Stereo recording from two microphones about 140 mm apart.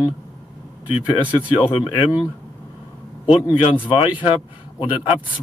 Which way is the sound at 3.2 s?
35° left (ahead or behind).